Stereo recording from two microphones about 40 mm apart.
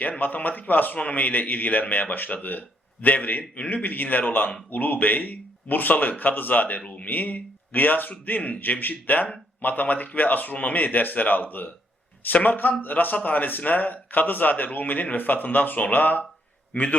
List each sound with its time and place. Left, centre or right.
0.0 s a man's voice: left